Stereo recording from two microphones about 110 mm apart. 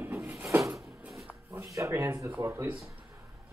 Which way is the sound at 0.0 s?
25° right (ahead or behind).